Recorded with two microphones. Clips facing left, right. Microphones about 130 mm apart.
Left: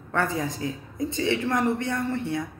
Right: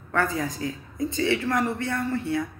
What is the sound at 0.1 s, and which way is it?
Speech, 25° left (ahead or behind).